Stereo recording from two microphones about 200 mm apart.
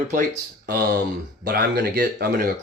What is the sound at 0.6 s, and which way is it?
Speech, 45° right (ahead or behind).